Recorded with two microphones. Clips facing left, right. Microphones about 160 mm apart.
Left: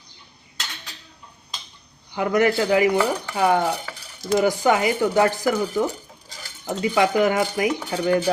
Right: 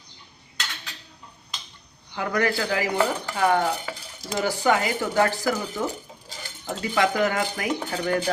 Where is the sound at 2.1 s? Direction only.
20° left (ahead or behind).